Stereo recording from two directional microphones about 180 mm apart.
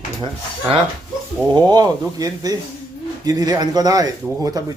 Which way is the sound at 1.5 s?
25° right (ahead or behind).